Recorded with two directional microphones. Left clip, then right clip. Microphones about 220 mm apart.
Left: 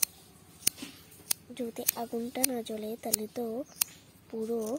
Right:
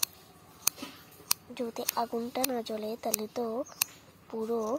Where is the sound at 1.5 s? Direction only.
45° left (ahead or behind).